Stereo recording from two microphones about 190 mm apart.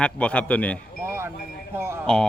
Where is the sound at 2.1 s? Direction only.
5° left (ahead or behind).